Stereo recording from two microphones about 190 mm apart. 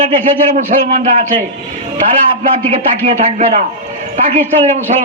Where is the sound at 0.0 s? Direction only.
40° right (ahead or behind).